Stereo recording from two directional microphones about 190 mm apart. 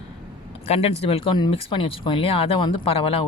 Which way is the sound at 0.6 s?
30° left (ahead or behind).